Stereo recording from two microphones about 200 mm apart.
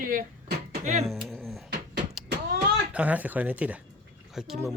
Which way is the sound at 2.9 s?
5° right (ahead or behind).